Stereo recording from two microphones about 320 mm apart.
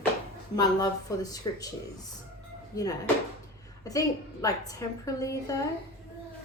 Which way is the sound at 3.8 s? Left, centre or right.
Centre.